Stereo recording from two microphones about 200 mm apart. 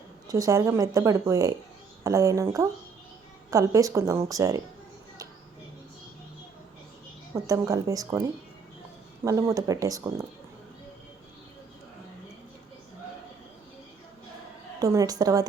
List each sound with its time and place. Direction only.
0.3 s a woman's voice: 15° right (ahead or behind)
7.3 s a woman's voice: 15° right (ahead or behind)
9.2 s a woman's voice: 15° right (ahead or behind)
14.8 s a woman's voice: 20° right (ahead or behind)